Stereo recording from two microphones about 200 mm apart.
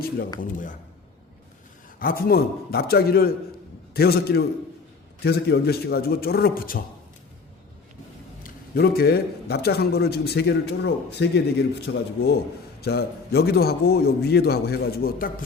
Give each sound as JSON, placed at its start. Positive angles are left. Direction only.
{"t": 0.3, "sound": "a man's voice", "side_deg": 40}
{"t": 2.0, "sound": "a man's voice", "side_deg": 45}
{"t": 8.4, "sound": "a man's voice", "side_deg": 50}
{"t": 11.9, "sound": "speech", "side_deg": 70}
{"t": 12.8, "sound": "a man's voice", "side_deg": 50}